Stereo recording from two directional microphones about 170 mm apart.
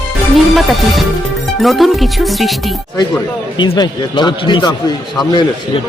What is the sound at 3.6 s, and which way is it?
A man's voice, 25° left (ahead or behind).